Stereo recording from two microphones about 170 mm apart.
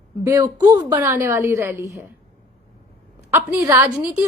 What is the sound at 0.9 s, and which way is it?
A woman's voice, 10° right (ahead or behind).